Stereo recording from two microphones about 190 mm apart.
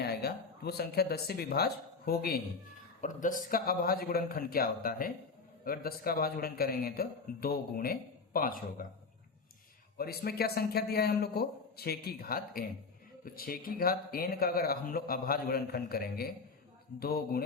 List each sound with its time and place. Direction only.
0.0 s speech: 55° left (ahead or behind)
10.0 s a man's voice: 55° left (ahead or behind)